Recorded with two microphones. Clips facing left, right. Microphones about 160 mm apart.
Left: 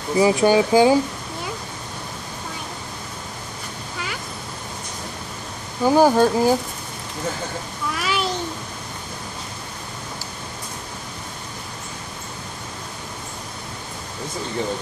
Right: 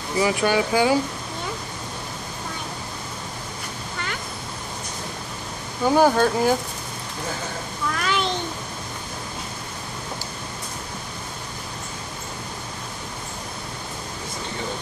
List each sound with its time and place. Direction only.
0.2 s speech: 25° left (ahead or behind)
5.9 s speech: 10° left (ahead or behind)
8.0 s a sound: 5° left (ahead or behind)